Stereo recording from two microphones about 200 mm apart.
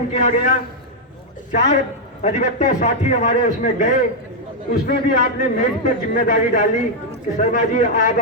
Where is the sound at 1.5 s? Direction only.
35° left (ahead or behind).